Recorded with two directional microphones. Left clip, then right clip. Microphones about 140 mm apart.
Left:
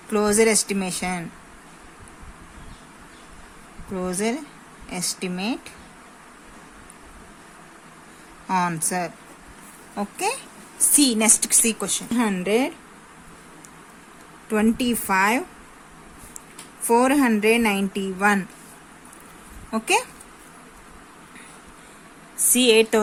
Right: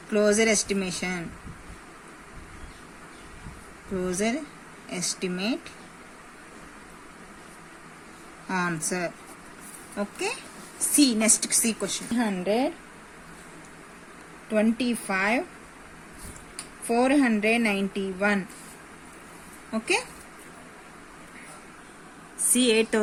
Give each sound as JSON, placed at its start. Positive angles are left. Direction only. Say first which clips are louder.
{"t": 0.1, "sound": "speech", "louder": "left 3 dB", "side_deg": 40}
{"t": 4.0, "sound": "speech", "louder": "left 2 dB", "side_deg": 35}
{"t": 8.4, "sound": "a woman's voice", "louder": "left 5 dB", "side_deg": 35}
{"t": 12.1, "sound": "speech", "louder": "left 4 dB", "side_deg": 90}
{"t": 14.5, "sound": "speech", "louder": "left 3 dB", "side_deg": 65}
{"t": 16.8, "sound": "speech", "louder": "left 4 dB", "side_deg": 65}
{"t": 19.7, "sound": "a woman's voice", "louder": "left 5 dB", "side_deg": 50}
{"t": 22.5, "sound": "speech", "louder": "left 6 dB", "side_deg": 40}